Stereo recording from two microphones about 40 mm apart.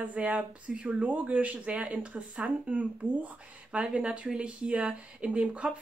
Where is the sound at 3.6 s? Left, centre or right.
Right.